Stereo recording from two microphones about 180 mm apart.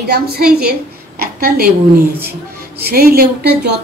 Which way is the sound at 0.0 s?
60° right (ahead or behind).